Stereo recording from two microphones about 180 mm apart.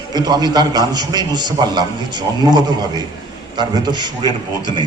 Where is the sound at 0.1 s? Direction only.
20° right (ahead or behind).